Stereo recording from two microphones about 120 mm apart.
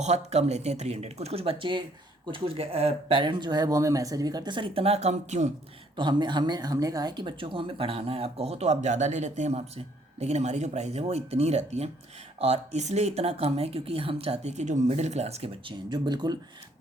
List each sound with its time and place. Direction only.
0.0 s speech: 70° right (ahead or behind)
6.0 s speech: 40° right (ahead or behind); by 15.7 s 60° right (ahead or behind)
15.9 s speech: 35° right (ahead or behind)